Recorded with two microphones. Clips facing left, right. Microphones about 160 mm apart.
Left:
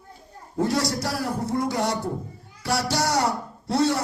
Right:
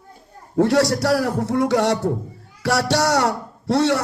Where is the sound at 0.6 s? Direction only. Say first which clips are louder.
Right 7 dB; 75° right (ahead or behind).